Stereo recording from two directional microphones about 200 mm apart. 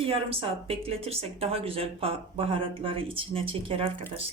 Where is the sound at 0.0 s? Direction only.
30° right (ahead or behind).